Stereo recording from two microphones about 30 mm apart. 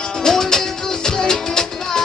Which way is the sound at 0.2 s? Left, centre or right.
Centre.